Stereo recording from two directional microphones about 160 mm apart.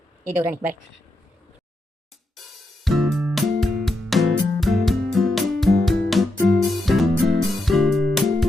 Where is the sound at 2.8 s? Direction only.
Centre (ahead or behind).